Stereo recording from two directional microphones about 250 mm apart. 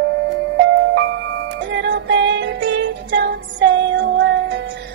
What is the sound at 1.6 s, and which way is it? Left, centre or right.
Music, right.